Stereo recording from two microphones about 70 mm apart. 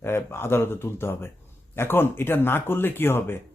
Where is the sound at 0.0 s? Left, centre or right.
Left.